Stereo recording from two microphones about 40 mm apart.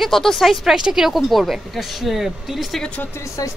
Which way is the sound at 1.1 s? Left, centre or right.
Centre.